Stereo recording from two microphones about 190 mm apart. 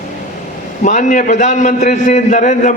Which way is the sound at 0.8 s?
40° left (ahead or behind).